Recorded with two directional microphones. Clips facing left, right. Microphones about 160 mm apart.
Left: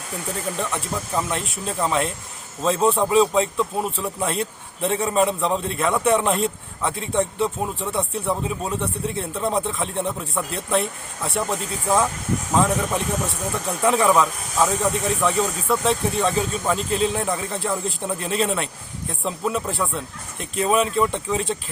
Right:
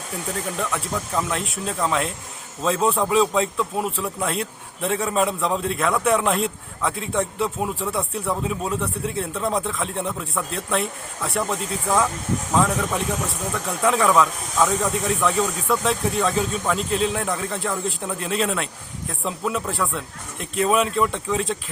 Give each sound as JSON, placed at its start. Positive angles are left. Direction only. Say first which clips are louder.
{"t": 0.5, "sound": "a man's voice", "louder": "even", "side_deg": 0}